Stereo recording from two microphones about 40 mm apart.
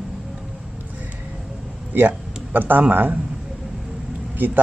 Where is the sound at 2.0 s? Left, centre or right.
Right.